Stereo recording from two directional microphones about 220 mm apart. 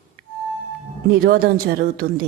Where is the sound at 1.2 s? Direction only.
45° right (ahead or behind).